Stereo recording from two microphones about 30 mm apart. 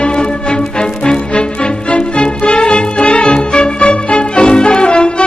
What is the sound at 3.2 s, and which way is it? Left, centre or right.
Music, left.